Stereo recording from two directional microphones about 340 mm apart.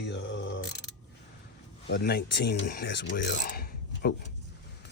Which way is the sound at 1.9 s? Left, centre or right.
Left.